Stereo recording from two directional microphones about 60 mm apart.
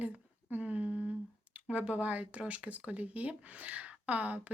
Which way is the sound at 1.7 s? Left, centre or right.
Right.